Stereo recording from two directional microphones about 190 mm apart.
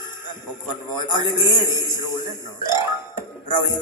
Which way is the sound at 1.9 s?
20° left (ahead or behind).